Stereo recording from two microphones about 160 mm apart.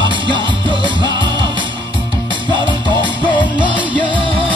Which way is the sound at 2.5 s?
30° right (ahead or behind).